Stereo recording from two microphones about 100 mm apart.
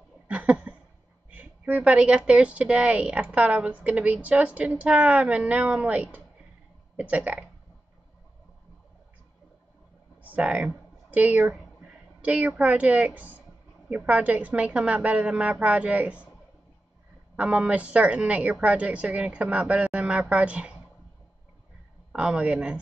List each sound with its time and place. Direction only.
0.3 s a sound: 10° right (ahead or behind)
1.3 s speech: 15° right (ahead or behind)
10.3 s speech: 15° right (ahead or behind)
17.4 s speech: 10° right (ahead or behind)
22.1 s speech: 10° right (ahead or behind)